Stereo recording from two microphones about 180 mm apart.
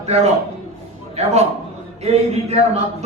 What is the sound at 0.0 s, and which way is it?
A man's voice, 35° right (ahead or behind).